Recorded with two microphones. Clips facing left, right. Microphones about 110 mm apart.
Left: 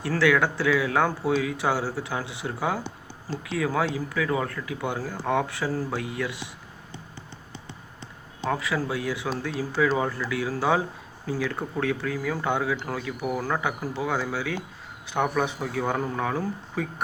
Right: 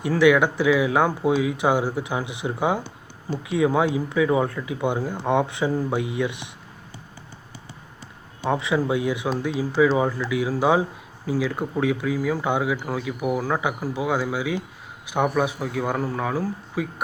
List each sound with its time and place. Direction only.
0.0 s speech: 15° right (ahead or behind)
8.4 s speech: 20° right (ahead or behind)